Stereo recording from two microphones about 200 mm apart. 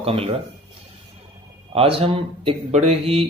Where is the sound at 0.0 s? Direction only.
30° right (ahead or behind).